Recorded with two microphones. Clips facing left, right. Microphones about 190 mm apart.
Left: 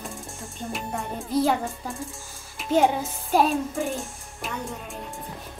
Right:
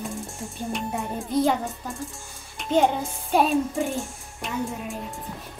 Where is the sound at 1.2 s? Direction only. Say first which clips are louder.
Even; centre (ahead or behind).